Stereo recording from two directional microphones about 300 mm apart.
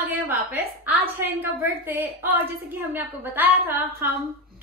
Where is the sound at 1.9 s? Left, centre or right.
Centre.